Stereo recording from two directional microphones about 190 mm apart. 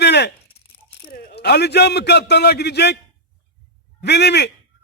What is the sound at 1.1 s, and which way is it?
A man's voice, 55° left (ahead or behind).